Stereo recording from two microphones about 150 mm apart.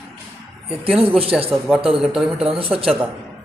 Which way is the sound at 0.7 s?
Centre (ahead or behind).